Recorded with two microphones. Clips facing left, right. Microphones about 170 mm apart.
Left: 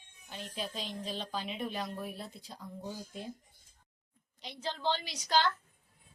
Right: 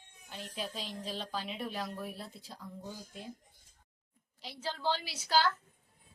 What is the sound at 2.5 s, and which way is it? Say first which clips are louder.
Speech: left 3 dB; 20° left (ahead or behind).